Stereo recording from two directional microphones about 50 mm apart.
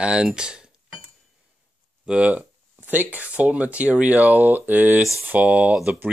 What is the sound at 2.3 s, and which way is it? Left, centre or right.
Speech, right.